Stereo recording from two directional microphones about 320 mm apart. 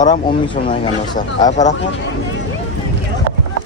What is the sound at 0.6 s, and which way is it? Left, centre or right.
Speech, left.